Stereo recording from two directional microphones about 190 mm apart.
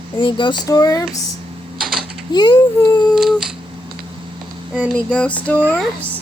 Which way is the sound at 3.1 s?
Centre (ahead or behind).